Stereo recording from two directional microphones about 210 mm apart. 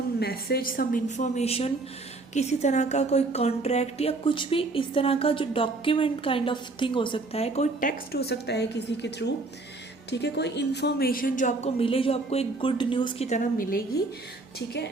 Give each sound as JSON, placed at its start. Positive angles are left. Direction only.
{"t": 0.2, "sound": "a woman's voice", "side_deg": 50}